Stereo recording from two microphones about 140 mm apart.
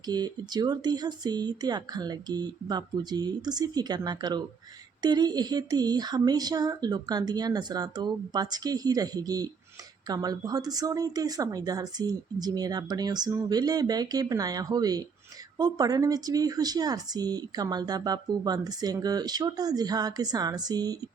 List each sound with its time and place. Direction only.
0.0 s speech: 30° right (ahead or behind)